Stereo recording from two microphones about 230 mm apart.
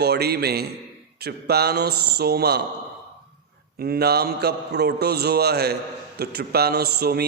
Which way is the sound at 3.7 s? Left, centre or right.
Right.